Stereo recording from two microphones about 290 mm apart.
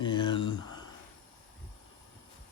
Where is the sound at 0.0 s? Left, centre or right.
Centre.